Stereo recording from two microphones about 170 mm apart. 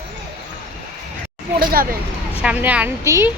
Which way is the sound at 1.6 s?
60° right (ahead or behind).